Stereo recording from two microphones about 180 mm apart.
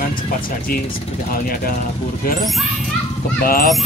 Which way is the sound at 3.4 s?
55° left (ahead or behind).